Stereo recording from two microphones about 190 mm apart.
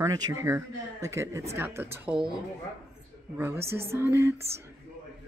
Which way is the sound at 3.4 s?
15° right (ahead or behind).